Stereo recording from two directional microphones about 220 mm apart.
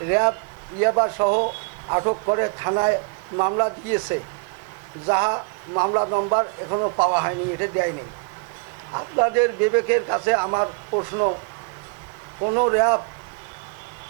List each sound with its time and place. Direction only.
0.1 s a man's voice: 20° right (ahead or behind)
12.4 s a man's voice: 25° right (ahead or behind)